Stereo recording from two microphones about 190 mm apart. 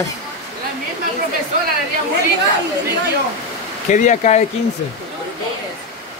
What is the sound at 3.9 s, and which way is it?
Speech, 40° left (ahead or behind).